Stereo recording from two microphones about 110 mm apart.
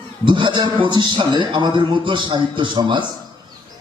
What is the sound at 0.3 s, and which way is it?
A man's voice, 45° right (ahead or behind).